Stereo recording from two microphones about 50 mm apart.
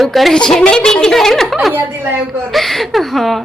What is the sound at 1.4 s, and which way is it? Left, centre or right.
A woman's voice, centre.